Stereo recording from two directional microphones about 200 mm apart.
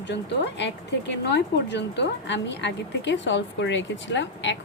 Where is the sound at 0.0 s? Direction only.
60° left (ahead or behind).